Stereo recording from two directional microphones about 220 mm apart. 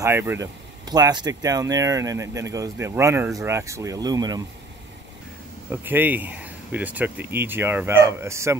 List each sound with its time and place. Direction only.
0.0 s speech: 10° right (ahead or behind)
5.7 s speech: 10° right (ahead or behind)